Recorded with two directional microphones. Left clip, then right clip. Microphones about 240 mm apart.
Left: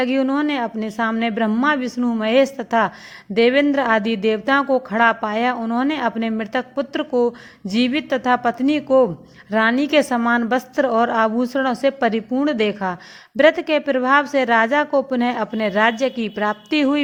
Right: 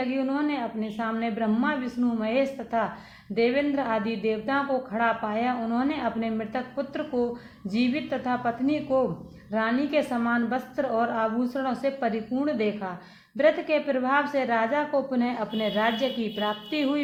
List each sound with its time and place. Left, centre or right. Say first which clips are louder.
0.0 s a woman's voice: left 8 dB; left